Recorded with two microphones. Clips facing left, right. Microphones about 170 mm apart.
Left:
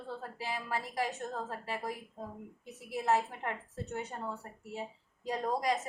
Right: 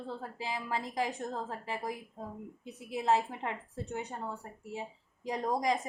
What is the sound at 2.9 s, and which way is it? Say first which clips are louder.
A woman's voice: right 1 dB; 20° right (ahead or behind).